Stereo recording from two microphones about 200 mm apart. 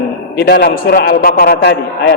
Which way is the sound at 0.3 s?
55° left (ahead or behind).